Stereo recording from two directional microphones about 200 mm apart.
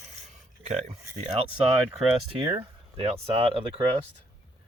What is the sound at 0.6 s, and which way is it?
Speech, 35° right (ahead or behind).